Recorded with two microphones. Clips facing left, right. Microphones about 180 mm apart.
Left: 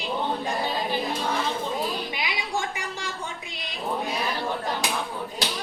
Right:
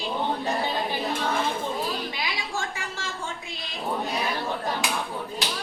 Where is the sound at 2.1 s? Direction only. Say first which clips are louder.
Left 2 dB; 15° left (ahead or behind).